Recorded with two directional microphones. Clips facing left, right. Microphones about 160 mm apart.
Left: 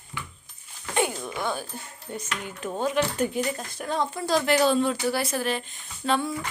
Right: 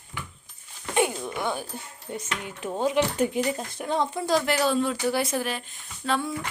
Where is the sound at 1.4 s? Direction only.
20° right (ahead or behind).